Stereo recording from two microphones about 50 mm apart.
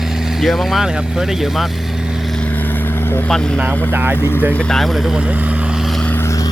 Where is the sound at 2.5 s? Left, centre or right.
Left.